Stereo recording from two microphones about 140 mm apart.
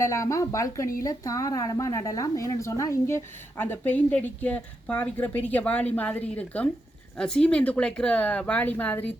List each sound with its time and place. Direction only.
0.0 s a woman's voice: 20° left (ahead or behind)